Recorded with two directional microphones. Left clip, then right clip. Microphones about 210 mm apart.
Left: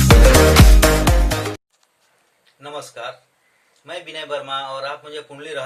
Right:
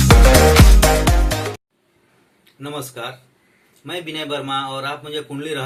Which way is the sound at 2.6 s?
15° left (ahead or behind).